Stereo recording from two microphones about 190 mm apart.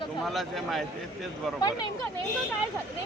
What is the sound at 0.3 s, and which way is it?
Speech, centre (ahead or behind).